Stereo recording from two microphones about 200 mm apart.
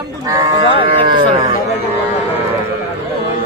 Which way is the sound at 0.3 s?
25° right (ahead or behind).